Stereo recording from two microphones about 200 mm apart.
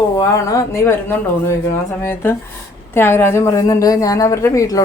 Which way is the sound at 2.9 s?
10° left (ahead or behind).